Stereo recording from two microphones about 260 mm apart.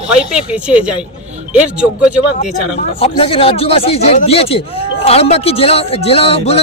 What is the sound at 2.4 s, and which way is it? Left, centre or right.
Speech, left.